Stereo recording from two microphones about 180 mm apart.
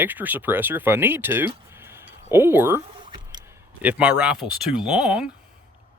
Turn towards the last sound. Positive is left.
turn(degrees=-5)  # may be behind; listen again after turning